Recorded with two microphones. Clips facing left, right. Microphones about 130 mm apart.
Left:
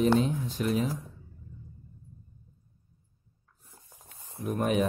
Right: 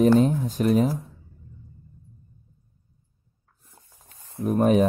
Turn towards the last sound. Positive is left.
turn(degrees=-40)  # may be behind; listen again after turning